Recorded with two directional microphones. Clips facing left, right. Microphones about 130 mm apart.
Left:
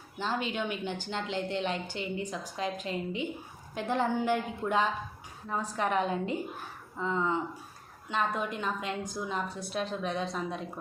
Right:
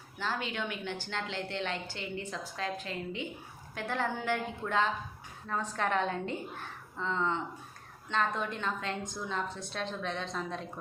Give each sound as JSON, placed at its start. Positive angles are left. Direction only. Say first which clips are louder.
{"t": 0.2, "sound": "a woman's voice", "louder": "left 3 dB", "side_deg": 20}